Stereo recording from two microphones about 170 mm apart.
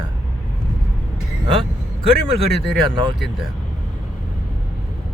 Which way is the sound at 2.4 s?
35° right (ahead or behind).